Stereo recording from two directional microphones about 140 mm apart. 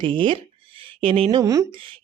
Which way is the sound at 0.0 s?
40° right (ahead or behind).